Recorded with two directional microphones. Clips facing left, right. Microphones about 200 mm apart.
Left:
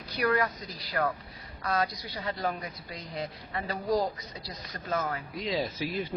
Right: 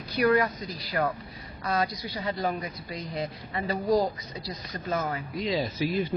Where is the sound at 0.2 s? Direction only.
25° right (ahead or behind).